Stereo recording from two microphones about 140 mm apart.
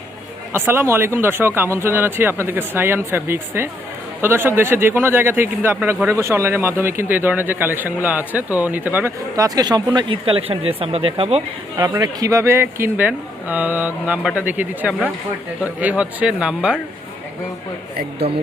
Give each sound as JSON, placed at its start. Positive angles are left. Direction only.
{"t": 0.7, "sound": "speech", "side_deg": -15}
{"t": 11.9, "sound": "speech", "side_deg": -25}